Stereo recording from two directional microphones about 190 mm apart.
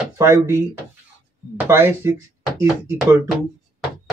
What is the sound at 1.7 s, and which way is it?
Speech, 15° right (ahead or behind).